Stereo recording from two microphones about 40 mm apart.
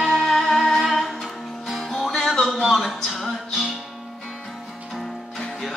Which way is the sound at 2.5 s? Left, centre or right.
Centre.